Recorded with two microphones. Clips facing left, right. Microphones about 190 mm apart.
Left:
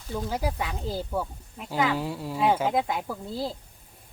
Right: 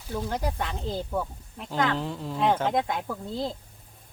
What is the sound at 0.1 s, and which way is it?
Speech, 5° left (ahead or behind).